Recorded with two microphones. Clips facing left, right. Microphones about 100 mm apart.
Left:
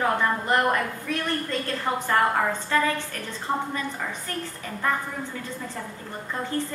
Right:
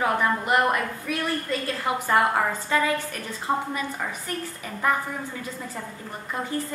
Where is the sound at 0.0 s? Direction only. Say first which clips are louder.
Even; 15° right (ahead or behind).